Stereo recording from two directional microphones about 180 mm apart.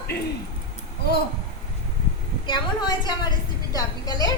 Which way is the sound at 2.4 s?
25° left (ahead or behind).